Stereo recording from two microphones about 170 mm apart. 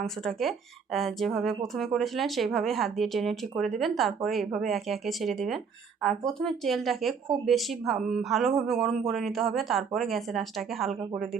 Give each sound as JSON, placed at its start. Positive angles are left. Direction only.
{"t": 0.0, "sound": "speech", "side_deg": 0}